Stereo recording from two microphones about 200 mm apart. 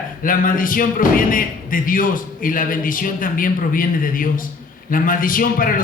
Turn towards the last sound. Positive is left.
turn(degrees=45)  # may be behind; listen again after turning